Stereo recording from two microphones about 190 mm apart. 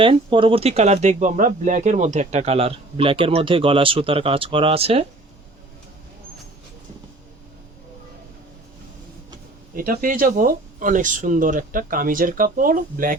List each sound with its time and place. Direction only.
0.0 s speech: 25° right (ahead or behind)
9.7 s speech: 45° right (ahead or behind)